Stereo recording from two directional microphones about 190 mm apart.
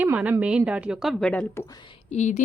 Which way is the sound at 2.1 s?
40° left (ahead or behind).